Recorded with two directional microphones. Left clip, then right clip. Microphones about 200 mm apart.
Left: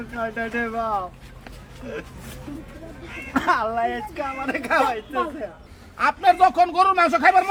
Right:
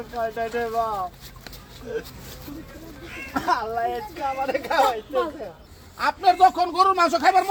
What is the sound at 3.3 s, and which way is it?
A man's voice, 10° left (ahead or behind).